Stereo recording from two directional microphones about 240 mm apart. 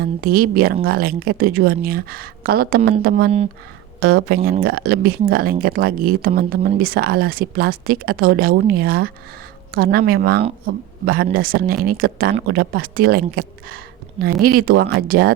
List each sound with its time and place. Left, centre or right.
0.0 s speech: right
4.0 s speech: right